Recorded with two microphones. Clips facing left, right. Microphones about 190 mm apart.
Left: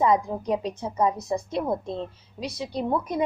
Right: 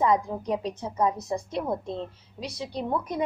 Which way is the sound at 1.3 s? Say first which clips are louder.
Left 2 dB; 15° left (ahead or behind).